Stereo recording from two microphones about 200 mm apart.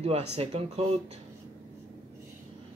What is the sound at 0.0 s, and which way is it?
Speech, 30° right (ahead or behind).